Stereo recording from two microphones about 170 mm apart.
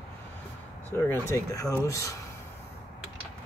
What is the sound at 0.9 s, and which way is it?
Speech, 15° left (ahead or behind).